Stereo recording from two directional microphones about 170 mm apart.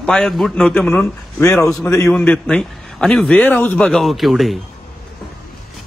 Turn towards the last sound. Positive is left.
turn(degrees=0)  # may be behind; listen again after turning